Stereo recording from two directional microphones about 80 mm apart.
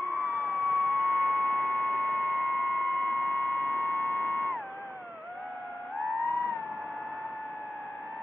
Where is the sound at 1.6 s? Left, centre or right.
Left.